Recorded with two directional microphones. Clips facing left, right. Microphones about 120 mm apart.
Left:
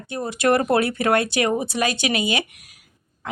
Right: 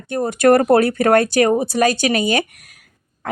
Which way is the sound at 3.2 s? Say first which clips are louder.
Right 6 dB; 50° right (ahead or behind).